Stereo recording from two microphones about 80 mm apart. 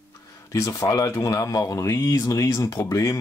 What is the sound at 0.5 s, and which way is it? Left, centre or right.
Speech, left.